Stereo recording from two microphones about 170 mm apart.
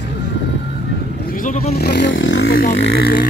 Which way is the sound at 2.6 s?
55° left (ahead or behind).